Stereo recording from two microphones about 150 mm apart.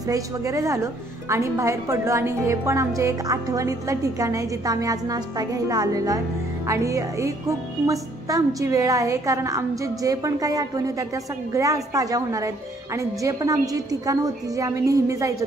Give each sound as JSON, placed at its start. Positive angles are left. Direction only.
{"t": 0.1, "sound": "a woman's voice", "side_deg": -20}